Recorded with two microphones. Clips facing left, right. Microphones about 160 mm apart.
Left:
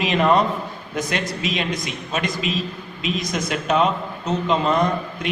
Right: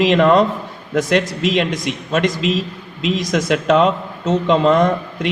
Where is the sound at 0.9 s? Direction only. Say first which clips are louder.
Right 8 dB; 80° right.